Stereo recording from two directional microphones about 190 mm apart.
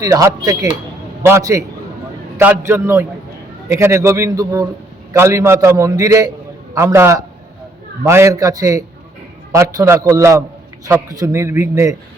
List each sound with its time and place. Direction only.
0.0 s a man's voice: 20° right (ahead or behind)